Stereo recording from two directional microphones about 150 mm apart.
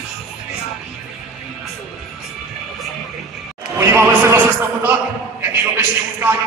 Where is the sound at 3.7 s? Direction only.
15° right (ahead or behind).